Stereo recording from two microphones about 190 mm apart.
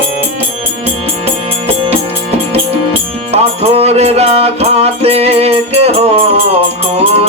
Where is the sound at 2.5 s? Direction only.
30° right (ahead or behind).